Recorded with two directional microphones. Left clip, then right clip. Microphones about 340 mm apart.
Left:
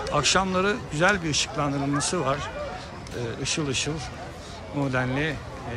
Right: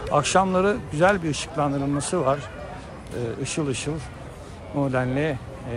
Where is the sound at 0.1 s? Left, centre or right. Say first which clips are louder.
Right 3 dB; centre.